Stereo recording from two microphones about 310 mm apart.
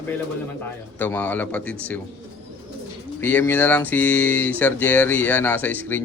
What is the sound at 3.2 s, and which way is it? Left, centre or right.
Speech, centre.